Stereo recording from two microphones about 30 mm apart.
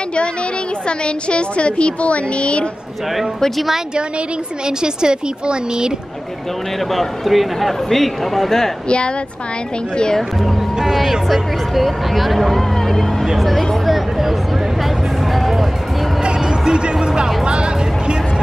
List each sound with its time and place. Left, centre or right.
0.8 s a woman's voice: left
4.6 s a woman's voice: right
6.9 s speech: centre
7.9 s speech: centre
8.8 s a woman's voice: left
11.2 s speech: centre
13.8 s a sound: centre
15.3 s music: centre
16.2 s music: right
16.9 s a woman's voice: right
17.5 s music: right